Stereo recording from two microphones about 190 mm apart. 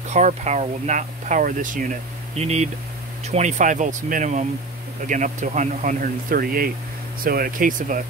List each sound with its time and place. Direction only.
0.1 s speech: 40° right (ahead or behind)